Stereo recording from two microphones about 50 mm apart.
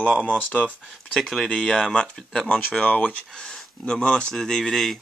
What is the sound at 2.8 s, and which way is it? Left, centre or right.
Speech, left.